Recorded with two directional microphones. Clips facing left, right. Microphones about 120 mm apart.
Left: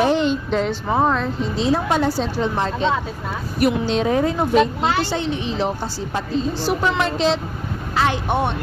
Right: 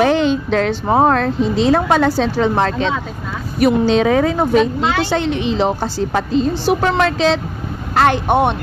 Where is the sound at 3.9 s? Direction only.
90° right; by 6.5 s 75° right (ahead or behind).